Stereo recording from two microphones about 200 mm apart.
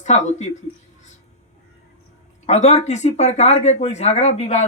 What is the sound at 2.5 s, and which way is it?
Speech, 35° left (ahead or behind).